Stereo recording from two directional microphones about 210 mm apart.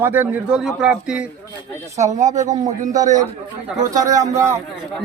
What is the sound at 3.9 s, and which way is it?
Speech, 15° right (ahead or behind).